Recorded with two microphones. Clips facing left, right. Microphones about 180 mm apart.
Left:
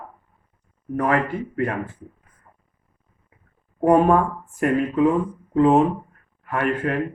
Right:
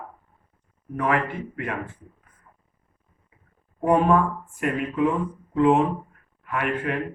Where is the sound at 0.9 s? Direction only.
40° left (ahead or behind).